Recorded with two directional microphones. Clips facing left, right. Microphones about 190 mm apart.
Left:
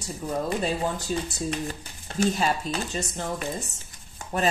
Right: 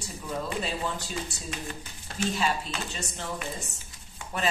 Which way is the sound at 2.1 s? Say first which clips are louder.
Left 4 dB; 45° left (ahead or behind).